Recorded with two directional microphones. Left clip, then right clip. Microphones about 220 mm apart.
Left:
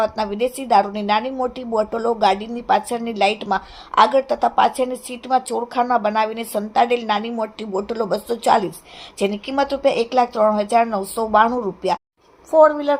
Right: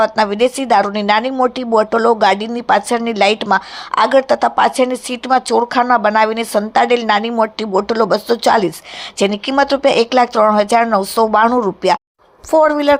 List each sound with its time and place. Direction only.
0.0 s speech: 20° right (ahead or behind)